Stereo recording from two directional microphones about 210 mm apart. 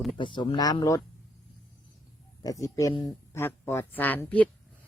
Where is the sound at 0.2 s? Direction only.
20° left (ahead or behind).